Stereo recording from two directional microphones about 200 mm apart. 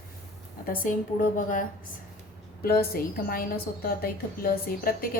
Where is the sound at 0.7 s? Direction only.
40° left (ahead or behind).